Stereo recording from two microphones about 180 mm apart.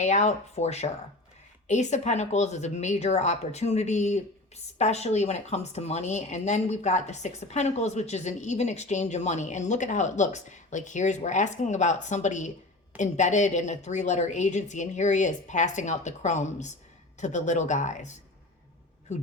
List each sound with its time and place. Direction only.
0.0 s speech: 40° left (ahead or behind)